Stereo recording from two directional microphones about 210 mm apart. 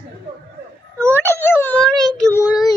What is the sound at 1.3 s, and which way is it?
Speech, 10° left (ahead or behind).